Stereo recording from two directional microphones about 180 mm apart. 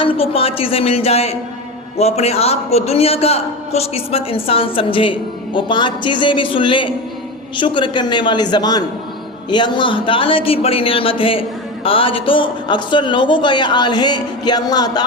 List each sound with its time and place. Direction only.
0.0 s a man's voice: 30° left (ahead or behind)